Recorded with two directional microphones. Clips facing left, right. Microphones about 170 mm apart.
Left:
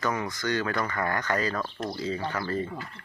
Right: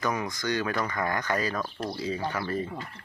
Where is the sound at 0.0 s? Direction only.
15° right (ahead or behind).